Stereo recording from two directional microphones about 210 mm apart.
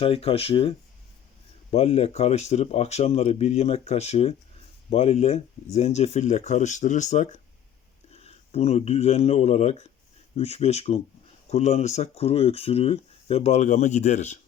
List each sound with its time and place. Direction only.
0.0 s speech: 25° left (ahead or behind)